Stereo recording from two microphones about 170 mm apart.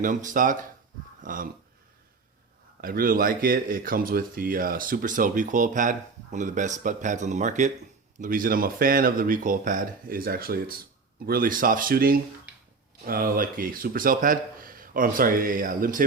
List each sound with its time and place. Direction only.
0.0 s speech: 50° right (ahead or behind)
2.8 s speech: 60° right (ahead or behind)